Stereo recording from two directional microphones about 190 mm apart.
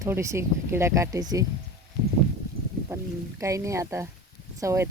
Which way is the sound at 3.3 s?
15° right (ahead or behind).